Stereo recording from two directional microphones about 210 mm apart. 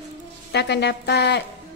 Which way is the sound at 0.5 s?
55° left (ahead or behind).